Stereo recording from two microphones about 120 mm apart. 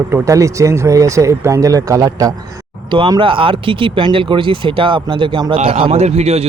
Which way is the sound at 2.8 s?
45° right (ahead or behind).